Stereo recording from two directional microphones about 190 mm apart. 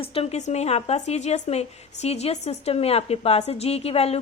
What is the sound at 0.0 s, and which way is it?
A woman's voice, 30° left (ahead or behind).